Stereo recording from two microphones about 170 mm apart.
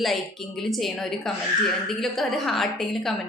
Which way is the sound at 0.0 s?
Centre (ahead or behind).